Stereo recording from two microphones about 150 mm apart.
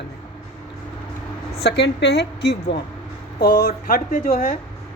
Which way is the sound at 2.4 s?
90° left.